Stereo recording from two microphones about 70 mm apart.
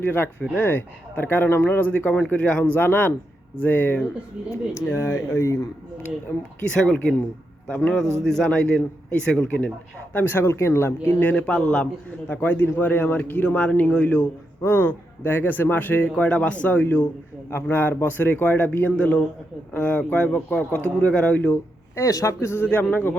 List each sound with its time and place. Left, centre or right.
0.0 s speech: left
2.7 s speech: left
4.7 s speech: left
6.6 s speech: centre
8.2 s speech: centre
10.1 s speech: left
10.4 s a man's voice: left
11.2 s speech: left
12.3 s speech: left
14.6 s speech: left; by 21.5 s centre
21.5 s a man's voice: left